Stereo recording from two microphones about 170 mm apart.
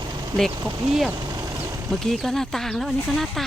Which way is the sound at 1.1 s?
25° right (ahead or behind).